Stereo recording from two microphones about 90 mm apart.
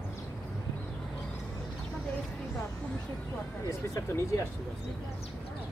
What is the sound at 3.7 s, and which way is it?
Speech, 40° left (ahead or behind).